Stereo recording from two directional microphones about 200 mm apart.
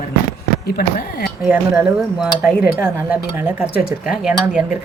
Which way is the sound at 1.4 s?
5° right (ahead or behind).